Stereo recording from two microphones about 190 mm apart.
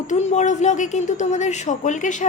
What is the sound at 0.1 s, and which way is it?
A woman's voice, 40° left (ahead or behind).